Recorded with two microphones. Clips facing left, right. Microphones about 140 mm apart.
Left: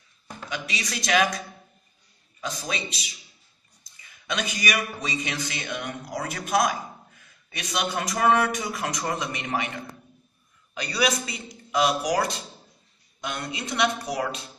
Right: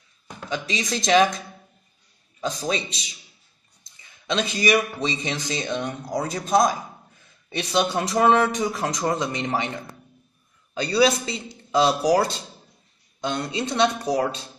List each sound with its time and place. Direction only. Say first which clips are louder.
0.5 s speech: right 6 dB; 30° right (ahead or behind)
2.4 s a man's voice: right 6 dB; 30° right (ahead or behind)
4.3 s speech: right 7 dB; 30° right (ahead or behind)
10.7 s speech: right 6 dB; 30° right (ahead or behind)